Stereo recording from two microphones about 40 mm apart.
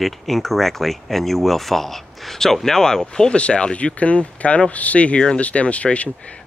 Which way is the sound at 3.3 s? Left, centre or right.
Left.